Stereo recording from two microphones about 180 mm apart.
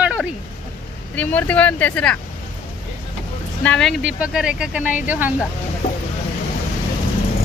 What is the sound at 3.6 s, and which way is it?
Speech, 5° left (ahead or behind).